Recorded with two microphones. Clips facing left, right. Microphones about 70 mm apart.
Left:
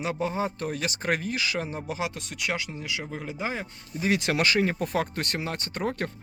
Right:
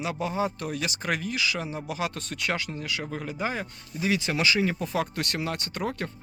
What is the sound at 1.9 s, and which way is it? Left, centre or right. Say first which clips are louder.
Speech: right 1 dB; centre.